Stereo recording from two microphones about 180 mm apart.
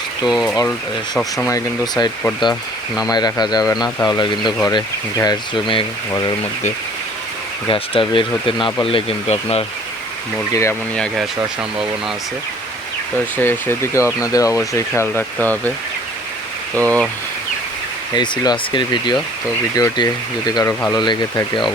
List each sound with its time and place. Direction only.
0.3 s speech: centre (ahead or behind)
1.5 s speech: 20° left (ahead or behind)
3.1 s speech: 20° left (ahead or behind)
4.2 s speech: 25° left (ahead or behind)
7.7 s speech: 30° left (ahead or behind)
10.5 s speech: 15° left (ahead or behind)
10.9 s speech: 5° left (ahead or behind)
13.3 s speech: 10° left (ahead or behind)
16.7 s speech: 5° left (ahead or behind)
18.1 s speech: 25° left (ahead or behind)